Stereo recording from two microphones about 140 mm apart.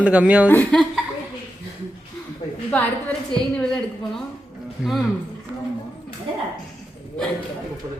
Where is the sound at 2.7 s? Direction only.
10° left (ahead or behind).